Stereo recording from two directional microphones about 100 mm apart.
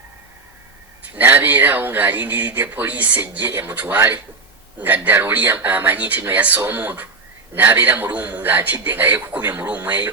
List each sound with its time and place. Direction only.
1.1 s a man's voice: 20° right (ahead or behind)